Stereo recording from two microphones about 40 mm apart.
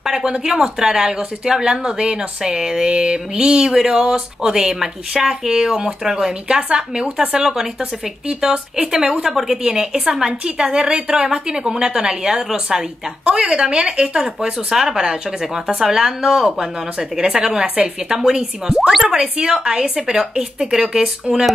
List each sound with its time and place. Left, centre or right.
0.0 s a sound: centre
0.3 s a woman's voice: centre
9.6 s a woman's voice: right
17.2 s a woman's voice: centre
18.8 s speech: centre
19.1 s a woman's voice: right